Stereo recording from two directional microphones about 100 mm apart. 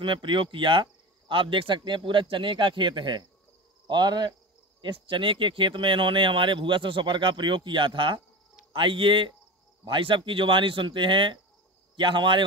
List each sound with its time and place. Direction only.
0.0 s speech: 55° right (ahead or behind)
4.8 s speech: 60° right (ahead or behind)